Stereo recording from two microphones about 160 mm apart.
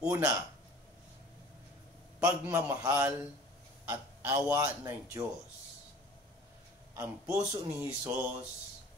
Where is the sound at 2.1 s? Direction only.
20° right (ahead or behind).